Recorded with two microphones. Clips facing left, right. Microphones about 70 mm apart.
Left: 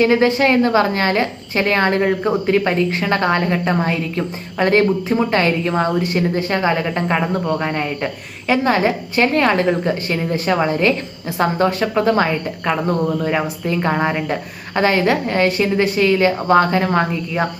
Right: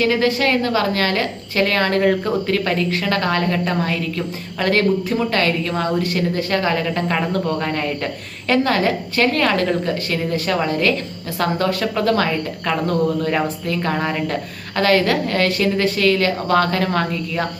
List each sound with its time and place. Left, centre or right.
0.0 s a woman's voice: left